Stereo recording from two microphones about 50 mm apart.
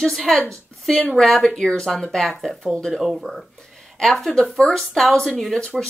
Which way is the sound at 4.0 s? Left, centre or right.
Centre.